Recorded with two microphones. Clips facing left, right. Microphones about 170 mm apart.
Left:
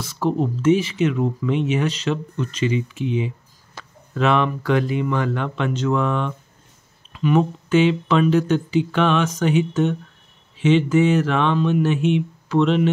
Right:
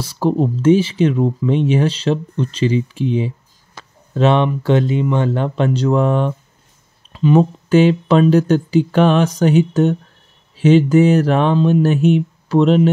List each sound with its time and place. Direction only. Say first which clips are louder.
0.0 s speech: right 4 dB; 35° right (ahead or behind)